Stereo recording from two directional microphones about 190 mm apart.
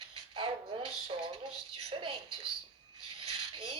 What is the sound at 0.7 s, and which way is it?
Speech, 30° right (ahead or behind).